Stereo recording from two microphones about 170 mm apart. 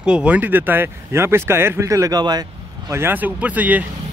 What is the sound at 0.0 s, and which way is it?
Speech, 5° right (ahead or behind).